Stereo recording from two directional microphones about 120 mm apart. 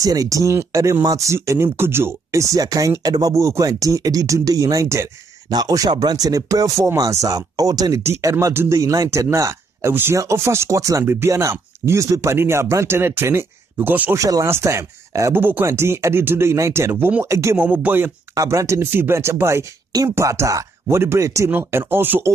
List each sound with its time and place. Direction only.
0.0 s speech: 30° right (ahead or behind)
14.1 s speech: 25° right (ahead or behind)
18.3 s speech: 30° right (ahead or behind)